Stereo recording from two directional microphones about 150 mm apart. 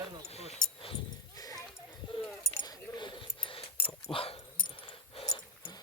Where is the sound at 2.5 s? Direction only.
25° left (ahead or behind).